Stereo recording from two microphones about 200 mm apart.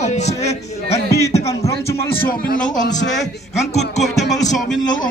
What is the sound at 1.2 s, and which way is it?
Music, 15° left (ahead or behind).